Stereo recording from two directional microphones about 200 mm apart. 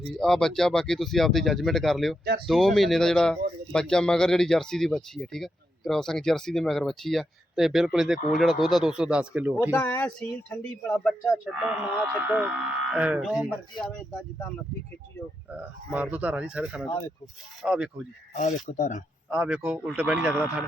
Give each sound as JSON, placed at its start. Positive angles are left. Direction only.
{"t": 0.1, "sound": "a man's voice", "side_deg": 5}
{"t": 9.7, "sound": "speech", "side_deg": 10}
{"t": 11.9, "sound": "a man's voice", "side_deg": -5}
{"t": 14.1, "sound": "speech", "side_deg": 10}
{"t": 15.5, "sound": "a man's voice", "side_deg": -5}
{"t": 18.6, "sound": "speech", "side_deg": 40}
{"t": 19.3, "sound": "a man's voice", "side_deg": -5}